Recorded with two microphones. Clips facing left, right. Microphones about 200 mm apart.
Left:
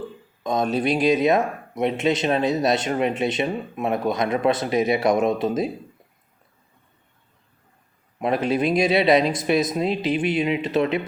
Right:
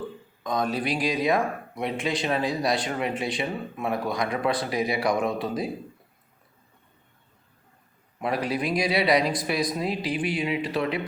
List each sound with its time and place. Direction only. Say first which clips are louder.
0.4 s speech: left 5 dB; 25° left (ahead or behind)
8.2 s speech: left 6 dB; 25° left (ahead or behind)